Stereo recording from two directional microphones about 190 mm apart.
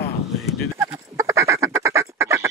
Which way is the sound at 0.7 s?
10° right (ahead or behind).